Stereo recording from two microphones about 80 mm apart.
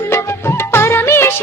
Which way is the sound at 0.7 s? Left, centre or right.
Left.